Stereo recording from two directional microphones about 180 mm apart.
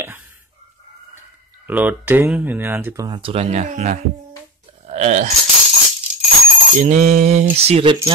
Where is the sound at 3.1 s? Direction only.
30° right (ahead or behind).